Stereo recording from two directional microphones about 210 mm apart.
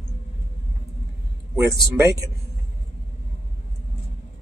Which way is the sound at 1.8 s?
15° right (ahead or behind).